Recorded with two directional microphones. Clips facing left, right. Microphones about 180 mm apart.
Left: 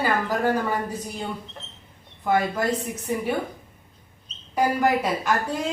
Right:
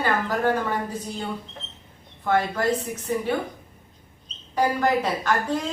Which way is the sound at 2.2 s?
10° left (ahead or behind).